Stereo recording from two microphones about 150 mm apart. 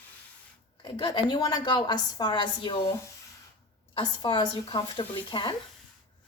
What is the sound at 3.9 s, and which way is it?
A woman's voice, 35° left (ahead or behind).